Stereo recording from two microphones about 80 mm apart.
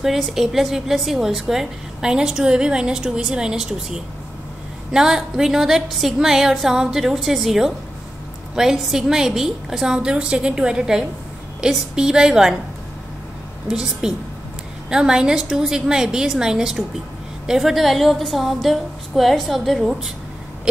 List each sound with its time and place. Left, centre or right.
0.0 s a woman's voice: centre
13.7 s a woman's voice: centre
20.7 s a sound: centre